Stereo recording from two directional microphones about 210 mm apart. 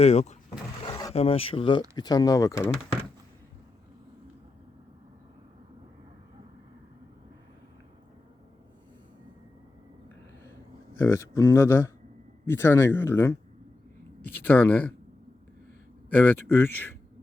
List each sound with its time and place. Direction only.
0.0 s speech: 30° left (ahead or behind)
0.8 s a sound: 20° left (ahead or behind)
1.1 s a man's voice: 30° left (ahead or behind)
11.0 s a man's voice: 15° left (ahead or behind)
16.0 s a man's voice: 10° left (ahead or behind)